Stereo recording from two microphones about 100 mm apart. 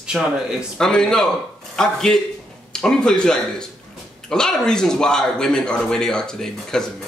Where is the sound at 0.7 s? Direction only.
5° left (ahead or behind).